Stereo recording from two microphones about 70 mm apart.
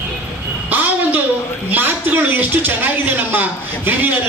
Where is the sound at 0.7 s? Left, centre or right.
Right.